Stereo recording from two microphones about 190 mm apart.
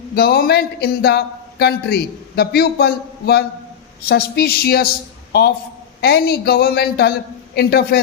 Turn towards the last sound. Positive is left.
turn(degrees=55)  # may be behind; listen again after turning